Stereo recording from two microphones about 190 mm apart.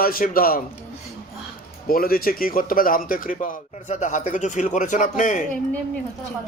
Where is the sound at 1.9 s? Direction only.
50° left (ahead or behind).